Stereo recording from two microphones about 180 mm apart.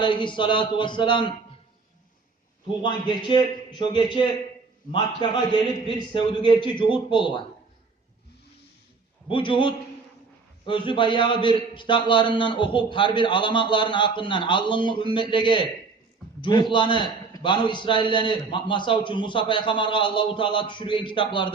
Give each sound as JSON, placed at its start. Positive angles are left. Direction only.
{"t": 0.0, "sound": "a man's voice", "side_deg": 25}
{"t": 2.8, "sound": "a man's voice", "side_deg": 25}
{"t": 9.3, "sound": "a man's voice", "side_deg": 30}